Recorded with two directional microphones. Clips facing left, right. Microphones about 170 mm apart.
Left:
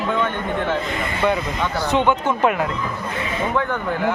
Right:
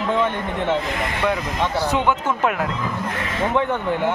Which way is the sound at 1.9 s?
5° right (ahead or behind).